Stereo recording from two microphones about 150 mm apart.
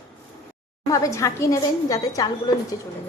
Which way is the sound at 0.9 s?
20° left (ahead or behind).